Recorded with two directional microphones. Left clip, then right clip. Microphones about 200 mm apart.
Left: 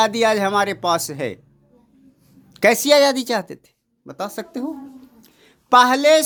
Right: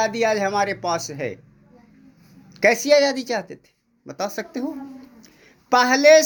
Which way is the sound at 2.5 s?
30° left (ahead or behind).